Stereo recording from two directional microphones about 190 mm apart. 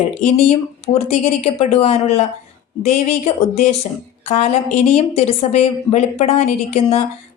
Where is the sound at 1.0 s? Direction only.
30° left (ahead or behind).